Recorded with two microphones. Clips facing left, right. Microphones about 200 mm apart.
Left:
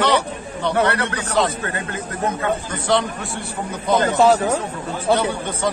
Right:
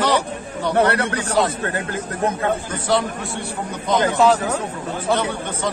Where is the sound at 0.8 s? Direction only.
30° right (ahead or behind).